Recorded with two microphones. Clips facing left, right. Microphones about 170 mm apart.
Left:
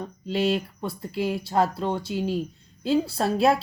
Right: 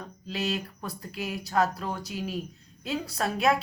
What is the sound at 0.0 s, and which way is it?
Speech, 30° left (ahead or behind).